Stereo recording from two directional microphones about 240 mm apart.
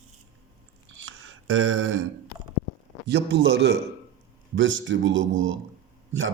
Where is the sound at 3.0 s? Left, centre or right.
Right.